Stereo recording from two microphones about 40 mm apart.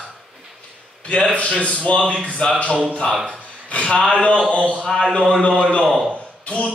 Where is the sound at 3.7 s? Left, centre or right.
Left.